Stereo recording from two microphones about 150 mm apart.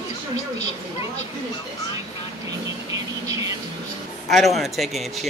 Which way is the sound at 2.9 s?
25° right (ahead or behind).